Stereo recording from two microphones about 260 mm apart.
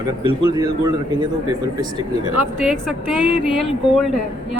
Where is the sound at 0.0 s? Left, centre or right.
Centre.